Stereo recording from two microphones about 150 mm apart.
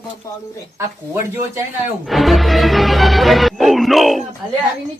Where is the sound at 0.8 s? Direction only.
20° right (ahead or behind).